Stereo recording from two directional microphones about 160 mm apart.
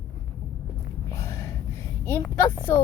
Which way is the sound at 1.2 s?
20° left (ahead or behind).